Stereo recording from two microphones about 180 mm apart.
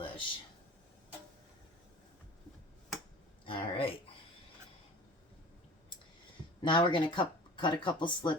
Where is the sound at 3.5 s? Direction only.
30° left (ahead or behind).